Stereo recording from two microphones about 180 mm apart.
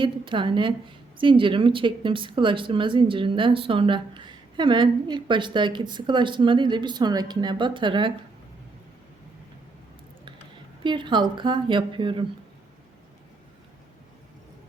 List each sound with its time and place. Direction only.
0.0 s a woman's voice: 25° right (ahead or behind)
10.8 s a woman's voice: 25° right (ahead or behind)